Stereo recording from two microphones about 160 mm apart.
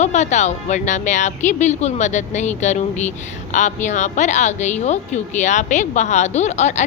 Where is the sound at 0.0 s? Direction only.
45° left (ahead or behind).